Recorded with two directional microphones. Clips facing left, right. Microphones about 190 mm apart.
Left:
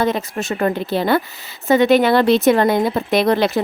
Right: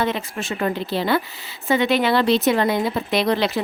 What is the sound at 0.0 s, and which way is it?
Speech, 40° left (ahead or behind).